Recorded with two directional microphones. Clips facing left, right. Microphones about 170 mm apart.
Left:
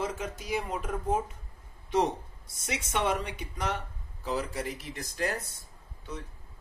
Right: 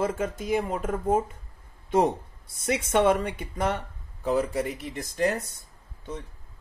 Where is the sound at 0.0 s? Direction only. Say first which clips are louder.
Right 6 dB; 50° right (ahead or behind).